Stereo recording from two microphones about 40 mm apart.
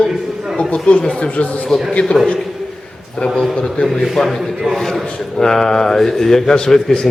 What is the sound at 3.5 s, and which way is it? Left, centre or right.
Speech, centre.